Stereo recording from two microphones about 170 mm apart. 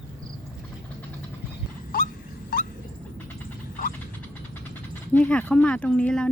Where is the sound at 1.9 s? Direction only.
55° left (ahead or behind).